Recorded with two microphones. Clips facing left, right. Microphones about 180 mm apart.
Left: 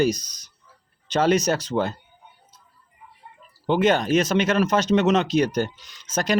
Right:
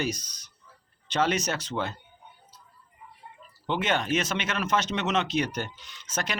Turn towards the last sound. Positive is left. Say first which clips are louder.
# left 10 dB
turn(degrees=40)  # may be behind; listen again after turning